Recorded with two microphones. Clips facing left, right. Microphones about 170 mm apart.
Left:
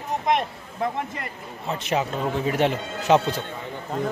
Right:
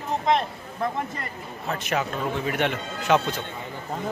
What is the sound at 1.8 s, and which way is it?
Speech, 25° left (ahead or behind).